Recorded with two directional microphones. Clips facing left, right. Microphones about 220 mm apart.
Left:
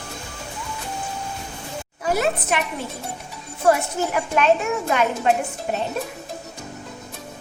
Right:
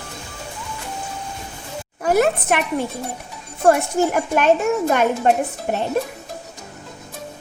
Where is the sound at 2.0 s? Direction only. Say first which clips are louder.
Right 5 dB; 55° right (ahead or behind).